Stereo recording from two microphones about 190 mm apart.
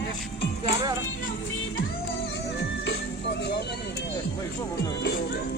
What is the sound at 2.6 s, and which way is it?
Music, 65° left (ahead or behind).